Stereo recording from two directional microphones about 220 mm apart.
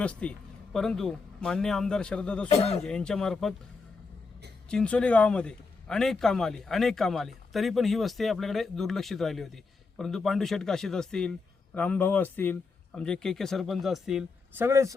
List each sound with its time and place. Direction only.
0.0 s speech: 5° left (ahead or behind)
2.5 s speech: 30° left (ahead or behind)
2.8 s speech: 5° left (ahead or behind)
4.7 s speech: 5° left (ahead or behind); by 14.9 s 15° right (ahead or behind)